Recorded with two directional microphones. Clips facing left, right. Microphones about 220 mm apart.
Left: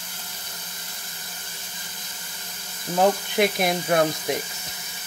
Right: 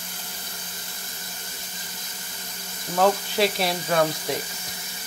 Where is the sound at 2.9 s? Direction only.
15° left (ahead or behind).